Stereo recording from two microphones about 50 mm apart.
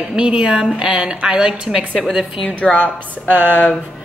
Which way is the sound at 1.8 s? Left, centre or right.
Right.